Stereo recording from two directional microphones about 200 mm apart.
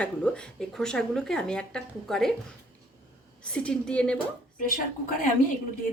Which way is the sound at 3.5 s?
5° left (ahead or behind).